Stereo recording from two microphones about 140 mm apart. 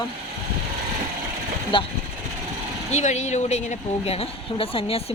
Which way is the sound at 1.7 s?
35° left (ahead or behind).